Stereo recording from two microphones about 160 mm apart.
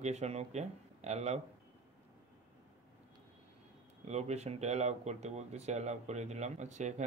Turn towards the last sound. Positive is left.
turn(degrees=-45)  # may be behind; listen again after turning